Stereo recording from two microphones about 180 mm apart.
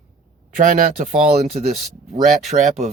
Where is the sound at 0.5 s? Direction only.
50° right (ahead or behind).